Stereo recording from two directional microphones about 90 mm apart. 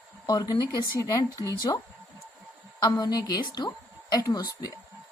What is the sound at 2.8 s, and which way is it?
A woman's voice, 50° left (ahead or behind).